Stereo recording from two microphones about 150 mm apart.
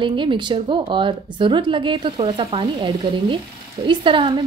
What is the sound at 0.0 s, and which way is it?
A woman's voice, 35° right (ahead or behind).